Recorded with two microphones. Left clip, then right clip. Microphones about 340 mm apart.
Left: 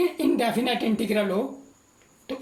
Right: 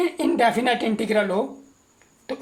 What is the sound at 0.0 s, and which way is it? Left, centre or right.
Speech, right.